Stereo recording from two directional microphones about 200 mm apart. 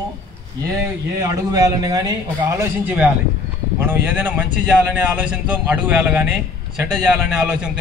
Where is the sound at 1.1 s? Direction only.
15° right (ahead or behind).